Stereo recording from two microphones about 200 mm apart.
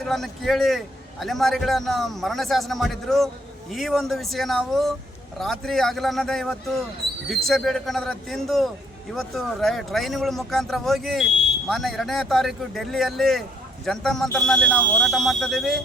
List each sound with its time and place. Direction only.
0.0 s speech: centre (ahead or behind)